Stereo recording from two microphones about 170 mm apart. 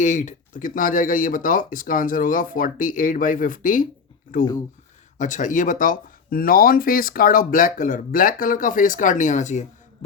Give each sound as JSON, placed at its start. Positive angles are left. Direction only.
{"t": 0.0, "sound": "speech", "side_deg": 45}
{"t": 5.1, "sound": "speech", "side_deg": 45}